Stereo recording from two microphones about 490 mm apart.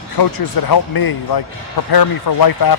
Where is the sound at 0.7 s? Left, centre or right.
Left.